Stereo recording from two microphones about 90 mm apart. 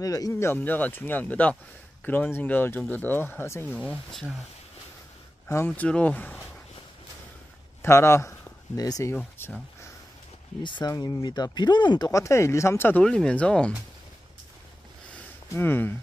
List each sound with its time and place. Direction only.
0.0 s speech: 40° left (ahead or behind)
0.6 s speech: 20° left (ahead or behind)
3.6 s speech: 15° left (ahead or behind)
5.7 s speech: 10° left (ahead or behind)
7.8 s speech: 30° left (ahead or behind)
9.4 s speech: 25° left (ahead or behind)
10.6 s speech: 60° left (ahead or behind)
10.9 s speech: 45° left (ahead or behind)
12.1 s speech: 35° left (ahead or behind)
13.0 s speech: 10° left (ahead or behind)
15.5 s speech: 20° left (ahead or behind)